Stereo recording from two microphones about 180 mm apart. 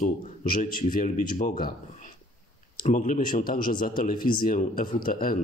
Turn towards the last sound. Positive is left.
turn(degrees=50)  # may be behind; listen again after turning